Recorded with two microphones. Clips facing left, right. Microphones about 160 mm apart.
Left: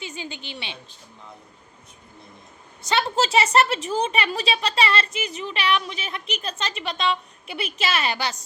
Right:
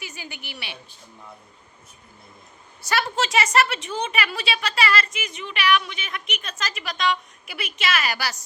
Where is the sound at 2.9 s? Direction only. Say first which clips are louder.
Left 1 dB; 25° left (ahead or behind).